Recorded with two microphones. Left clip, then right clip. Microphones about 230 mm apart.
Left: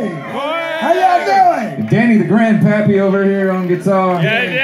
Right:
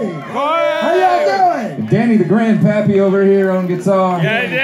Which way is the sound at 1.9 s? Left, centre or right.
Left.